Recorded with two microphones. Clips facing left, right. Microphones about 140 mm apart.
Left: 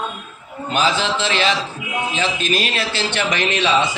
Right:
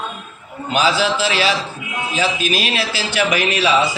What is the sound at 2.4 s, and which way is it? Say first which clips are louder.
A man's voice: right 1 dB; 5° right (ahead or behind).